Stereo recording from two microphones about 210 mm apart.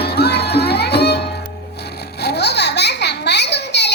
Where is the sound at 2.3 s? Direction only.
55° left (ahead or behind).